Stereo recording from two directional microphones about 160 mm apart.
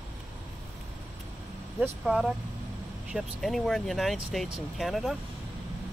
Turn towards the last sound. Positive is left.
turn(degrees=0)  # may be behind; listen again after turning